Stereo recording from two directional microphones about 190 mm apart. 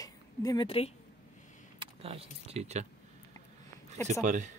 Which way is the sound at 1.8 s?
30° right (ahead or behind).